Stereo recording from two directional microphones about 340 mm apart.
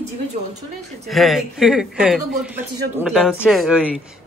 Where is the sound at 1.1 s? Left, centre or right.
Centre.